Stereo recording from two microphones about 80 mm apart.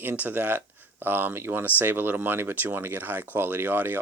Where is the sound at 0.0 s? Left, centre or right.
Right.